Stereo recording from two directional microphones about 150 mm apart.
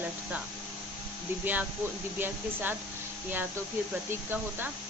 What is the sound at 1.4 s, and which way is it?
Speech, 10° right (ahead or behind).